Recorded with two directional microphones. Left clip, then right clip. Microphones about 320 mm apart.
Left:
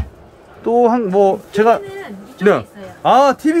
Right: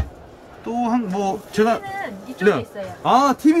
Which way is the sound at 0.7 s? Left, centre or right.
Centre.